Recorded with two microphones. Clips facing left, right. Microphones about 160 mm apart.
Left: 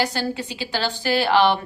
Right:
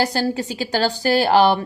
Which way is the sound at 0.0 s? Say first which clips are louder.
Right 4 dB; 35° right (ahead or behind).